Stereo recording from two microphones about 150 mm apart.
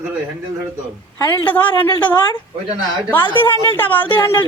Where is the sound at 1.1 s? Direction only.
15° left (ahead or behind).